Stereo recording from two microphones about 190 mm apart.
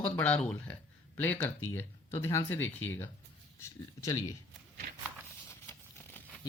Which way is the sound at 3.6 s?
15° left (ahead or behind).